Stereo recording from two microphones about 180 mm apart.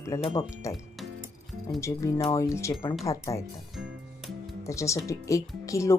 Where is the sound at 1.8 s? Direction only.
15° left (ahead or behind).